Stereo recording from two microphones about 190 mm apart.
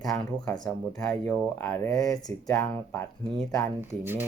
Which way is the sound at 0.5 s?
20° left (ahead or behind).